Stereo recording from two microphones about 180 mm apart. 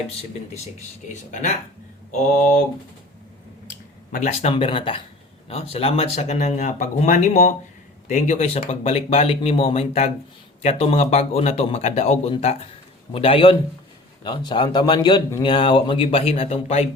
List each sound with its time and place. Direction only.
1.0 s speech: 45° left (ahead or behind)
4.1 s speech: 40° left (ahead or behind)